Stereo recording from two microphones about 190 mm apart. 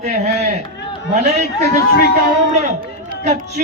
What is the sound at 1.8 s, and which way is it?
Speech, 55° left (ahead or behind).